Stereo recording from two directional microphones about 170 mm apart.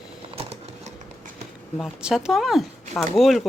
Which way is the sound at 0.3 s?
40° right (ahead or behind).